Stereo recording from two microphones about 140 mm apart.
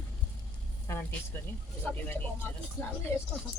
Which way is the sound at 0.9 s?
15° left (ahead or behind).